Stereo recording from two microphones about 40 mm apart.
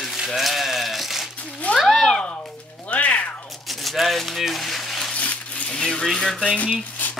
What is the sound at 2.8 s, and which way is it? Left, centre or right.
Music, left.